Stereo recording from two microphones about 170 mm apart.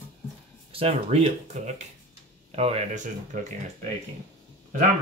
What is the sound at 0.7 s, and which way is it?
Speech, 35° right (ahead or behind).